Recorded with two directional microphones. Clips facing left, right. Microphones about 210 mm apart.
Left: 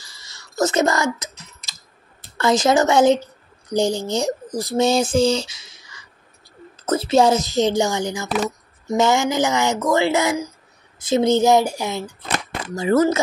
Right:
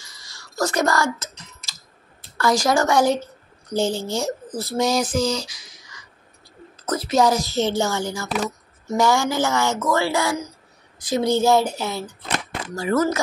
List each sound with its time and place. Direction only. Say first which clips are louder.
0.0 s typing: even; 25° left (ahead or behind)
2.3 s speech: left 3 dB; 20° left (ahead or behind)
12.7 s speech: left 4 dB; 25° left (ahead or behind)